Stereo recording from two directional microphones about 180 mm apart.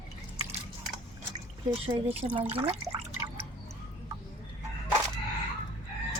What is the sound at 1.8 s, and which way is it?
Speech, 35° right (ahead or behind).